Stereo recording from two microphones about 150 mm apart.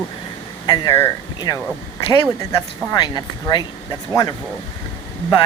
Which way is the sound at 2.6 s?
30° left (ahead or behind).